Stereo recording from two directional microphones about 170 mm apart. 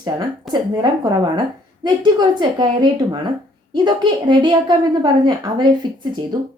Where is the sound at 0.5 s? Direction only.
25° right (ahead or behind).